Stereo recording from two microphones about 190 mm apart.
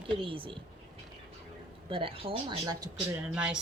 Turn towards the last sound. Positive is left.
turn(degrees=-5)  # may be behind; listen again after turning